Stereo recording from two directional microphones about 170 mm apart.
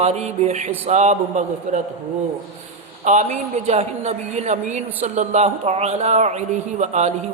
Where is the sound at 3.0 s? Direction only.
45° right (ahead or behind).